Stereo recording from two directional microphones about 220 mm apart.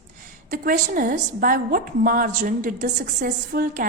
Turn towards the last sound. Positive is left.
turn(degrees=-40)  # may be behind; listen again after turning